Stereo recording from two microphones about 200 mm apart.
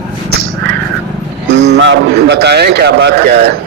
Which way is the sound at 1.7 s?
60° right (ahead or behind).